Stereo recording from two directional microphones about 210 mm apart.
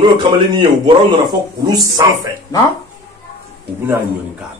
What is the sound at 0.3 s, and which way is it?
Speech, 20° right (ahead or behind).